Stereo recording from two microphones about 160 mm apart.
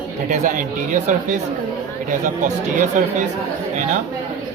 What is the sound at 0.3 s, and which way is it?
Speech, 55° right (ahead or behind).